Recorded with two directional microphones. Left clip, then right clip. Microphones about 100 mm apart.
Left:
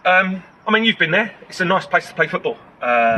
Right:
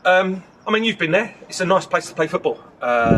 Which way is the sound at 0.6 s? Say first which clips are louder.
Left 3 dB; 25° right (ahead or behind).